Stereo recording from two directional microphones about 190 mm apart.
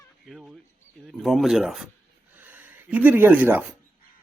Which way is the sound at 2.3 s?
10° right (ahead or behind).